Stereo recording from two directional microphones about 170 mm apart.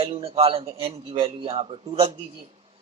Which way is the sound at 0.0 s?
35° right (ahead or behind).